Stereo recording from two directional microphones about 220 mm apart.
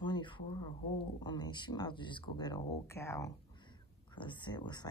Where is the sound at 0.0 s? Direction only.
20° left (ahead or behind).